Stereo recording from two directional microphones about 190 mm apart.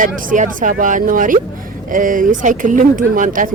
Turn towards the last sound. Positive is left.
turn(degrees=-45)  # may be behind; listen again after turning